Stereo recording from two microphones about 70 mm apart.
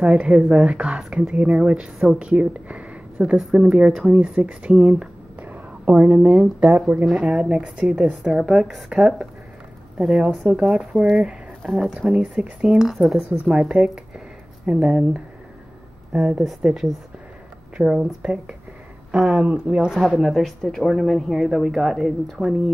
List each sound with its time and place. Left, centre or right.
0.0 s speech: centre
5.4 s a sound: right
7.1 s speech: centre
13.5 s speech: centre
16.4 s speech: centre
17.7 s speech: centre
20.2 s speech: centre